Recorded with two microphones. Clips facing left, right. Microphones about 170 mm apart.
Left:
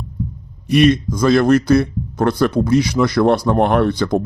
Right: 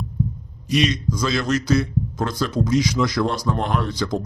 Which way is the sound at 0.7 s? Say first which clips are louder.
Left 8 dB; 55° left (ahead or behind).